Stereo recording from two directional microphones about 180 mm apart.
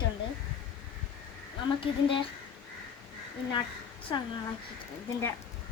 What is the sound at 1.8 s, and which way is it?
Speech, 30° left (ahead or behind).